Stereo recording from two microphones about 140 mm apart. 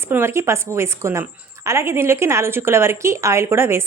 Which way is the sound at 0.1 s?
20° right (ahead or behind).